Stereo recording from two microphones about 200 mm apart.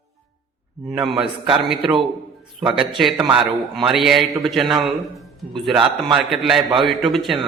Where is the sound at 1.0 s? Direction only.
25° right (ahead or behind).